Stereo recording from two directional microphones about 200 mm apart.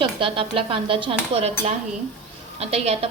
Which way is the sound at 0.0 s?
25° right (ahead or behind).